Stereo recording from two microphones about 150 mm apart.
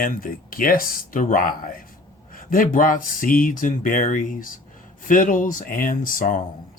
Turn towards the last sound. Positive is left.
turn(degrees=65)  # may be behind; listen again after turning